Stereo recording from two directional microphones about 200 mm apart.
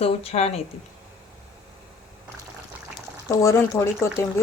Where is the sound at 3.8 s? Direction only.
10° left (ahead or behind).